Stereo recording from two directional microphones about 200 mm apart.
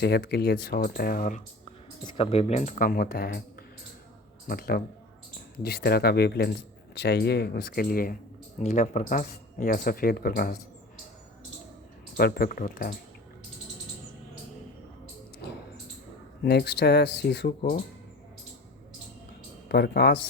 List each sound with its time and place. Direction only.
0.0 s speech: 55° left (ahead or behind)
2.0 s speech: 25° left (ahead or behind); by 3.4 s 50° left (ahead or behind)
4.4 s speech: 50° left (ahead or behind)
12.1 s speech: 50° left (ahead or behind)
15.4 s a sound: 55° left (ahead or behind)
16.4 s speech: 55° left (ahead or behind)
19.6 s speech: 55° left (ahead or behind)